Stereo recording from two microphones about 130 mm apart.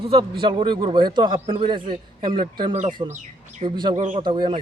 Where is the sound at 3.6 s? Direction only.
35° right (ahead or behind).